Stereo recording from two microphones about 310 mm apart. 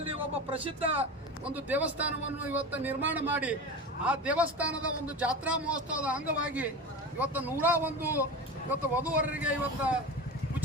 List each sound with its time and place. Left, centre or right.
0.5 s speech: centre
1.5 s a man's voice: centre